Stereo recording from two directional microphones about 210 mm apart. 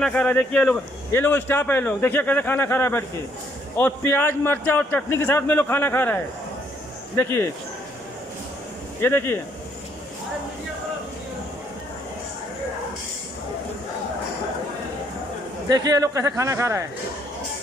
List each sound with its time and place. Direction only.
0.0 s a man's voice: 5° left (ahead or behind)
9.0 s a man's voice: 10° left (ahead or behind)
15.7 s speech: 20° right (ahead or behind)